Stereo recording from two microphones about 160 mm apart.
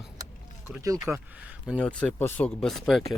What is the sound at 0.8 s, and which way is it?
Speech, 20° right (ahead or behind).